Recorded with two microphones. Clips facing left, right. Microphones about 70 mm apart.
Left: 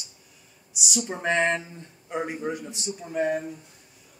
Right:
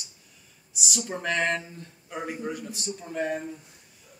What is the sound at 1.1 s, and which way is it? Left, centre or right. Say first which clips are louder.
A man's voice: left 3 dB; left.